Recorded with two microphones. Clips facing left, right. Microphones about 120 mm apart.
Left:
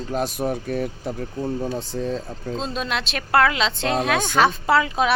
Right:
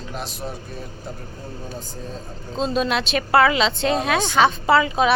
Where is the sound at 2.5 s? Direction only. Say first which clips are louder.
Right 5 dB; centre (ahead or behind).